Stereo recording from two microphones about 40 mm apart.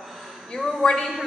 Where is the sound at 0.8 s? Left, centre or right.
Centre.